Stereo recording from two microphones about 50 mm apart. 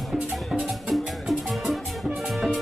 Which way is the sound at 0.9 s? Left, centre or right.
Centre.